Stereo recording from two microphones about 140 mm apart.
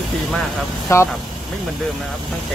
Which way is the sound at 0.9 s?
20° left (ahead or behind).